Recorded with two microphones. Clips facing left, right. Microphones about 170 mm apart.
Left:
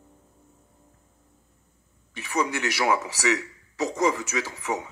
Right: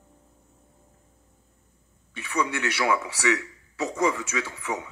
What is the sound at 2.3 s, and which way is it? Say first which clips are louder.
A man's voice: left 1 dB; 40° left (ahead or behind).